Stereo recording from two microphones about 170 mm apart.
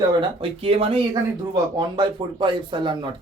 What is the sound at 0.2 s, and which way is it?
Speech, 30° right (ahead or behind).